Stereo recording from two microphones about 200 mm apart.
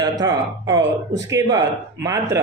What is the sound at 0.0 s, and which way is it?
Speech, 20° right (ahead or behind).